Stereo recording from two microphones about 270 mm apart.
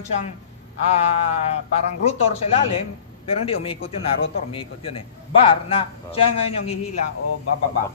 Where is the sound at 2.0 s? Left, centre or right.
Left.